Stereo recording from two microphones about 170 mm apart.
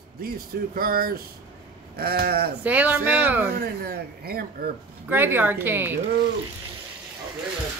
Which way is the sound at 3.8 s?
65° right (ahead or behind).